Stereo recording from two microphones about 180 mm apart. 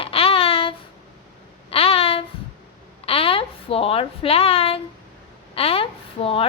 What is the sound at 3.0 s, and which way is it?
A child's voice, 30° left (ahead or behind).